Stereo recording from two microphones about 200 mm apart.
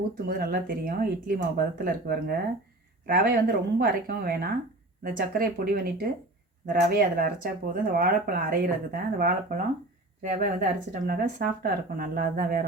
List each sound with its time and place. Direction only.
0.3 s speech: 50° right (ahead or behind)